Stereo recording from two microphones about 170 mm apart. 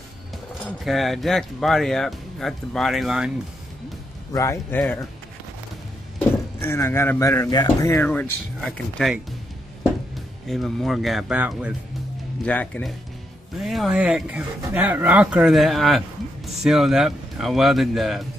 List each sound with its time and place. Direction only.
0.8 s speech: centre (ahead or behind)
4.3 s speech: 20° left (ahead or behind)
6.6 s speech: 15° left (ahead or behind); by 11.7 s 10° right (ahead or behind)
12.4 s speech: 10° left (ahead or behind)